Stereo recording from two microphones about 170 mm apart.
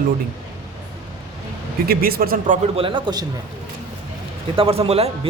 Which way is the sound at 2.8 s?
30° right (ahead or behind).